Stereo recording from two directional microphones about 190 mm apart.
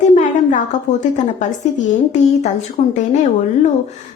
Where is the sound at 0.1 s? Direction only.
40° left (ahead or behind).